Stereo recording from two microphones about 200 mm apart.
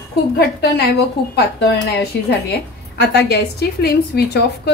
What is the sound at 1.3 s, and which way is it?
A woman's voice, 55° left (ahead or behind).